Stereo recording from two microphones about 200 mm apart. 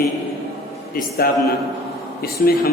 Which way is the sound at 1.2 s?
50° left (ahead or behind).